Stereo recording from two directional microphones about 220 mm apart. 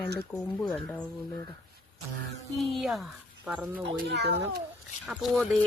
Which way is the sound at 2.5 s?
Centre (ahead or behind).